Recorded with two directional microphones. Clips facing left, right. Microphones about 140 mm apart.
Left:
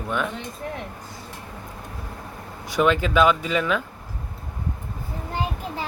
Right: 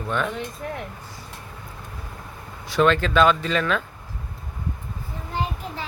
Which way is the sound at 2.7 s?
15° left (ahead or behind).